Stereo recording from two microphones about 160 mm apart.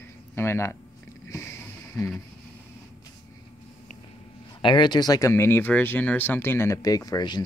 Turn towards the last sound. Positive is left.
turn(degrees=25)  # may be behind; listen again after turning